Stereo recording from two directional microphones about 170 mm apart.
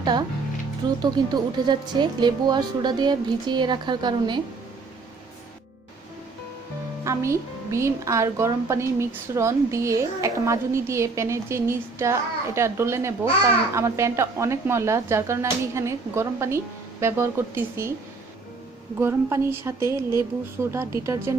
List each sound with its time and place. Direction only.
0.0 s speech: 25° right (ahead or behind)
7.0 s a woman's voice: 15° right (ahead or behind)
18.9 s a woman's voice: 15° right (ahead or behind)